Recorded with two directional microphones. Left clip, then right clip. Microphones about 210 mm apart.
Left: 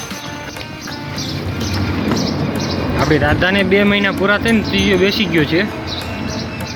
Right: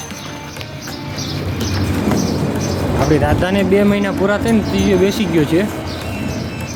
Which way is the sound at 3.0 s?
5° right (ahead or behind).